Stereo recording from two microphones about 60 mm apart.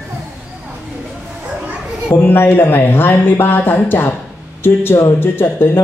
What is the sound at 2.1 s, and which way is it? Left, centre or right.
Speech, left.